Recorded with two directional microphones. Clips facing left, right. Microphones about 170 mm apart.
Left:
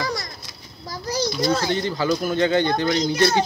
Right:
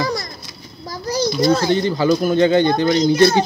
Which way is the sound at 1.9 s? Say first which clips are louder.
Right 6 dB; 20° right (ahead or behind).